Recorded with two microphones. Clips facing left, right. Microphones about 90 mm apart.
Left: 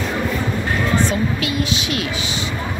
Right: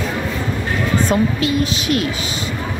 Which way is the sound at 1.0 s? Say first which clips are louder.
Right 3 dB; 40° right (ahead or behind).